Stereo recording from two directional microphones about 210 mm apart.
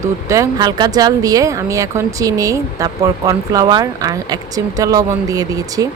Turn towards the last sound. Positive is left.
turn(degrees=-15)  # may be behind; listen again after turning